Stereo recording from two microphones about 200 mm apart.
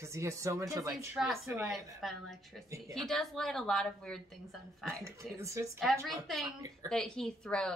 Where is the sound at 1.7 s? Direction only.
Centre (ahead or behind).